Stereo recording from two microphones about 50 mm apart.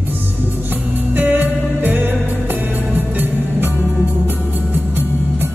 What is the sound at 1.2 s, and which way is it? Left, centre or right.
Music, right.